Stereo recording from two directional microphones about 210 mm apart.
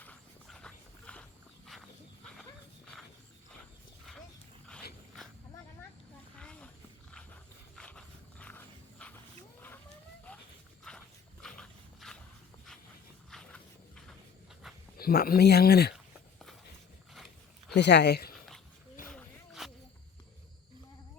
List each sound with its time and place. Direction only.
0.0 s horse: 5° left (ahead or behind)
6.4 s a sound: 5° left (ahead or behind)
7.8 s walk: 5° left (ahead or behind)
9.6 s vehicle: 10° left (ahead or behind)
10.3 s dog: 5° left (ahead or behind)
13.3 s a sound: centre (ahead or behind)
14.9 s speech: 45° left (ahead or behind)
17.7 s speech: 55° left (ahead or behind)
18.3 s dog: centre (ahead or behind)
19.1 s a sound: centre (ahead or behind)